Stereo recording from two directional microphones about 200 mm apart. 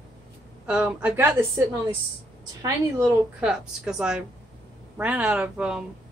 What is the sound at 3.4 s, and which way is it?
Speech, 5° right (ahead or behind).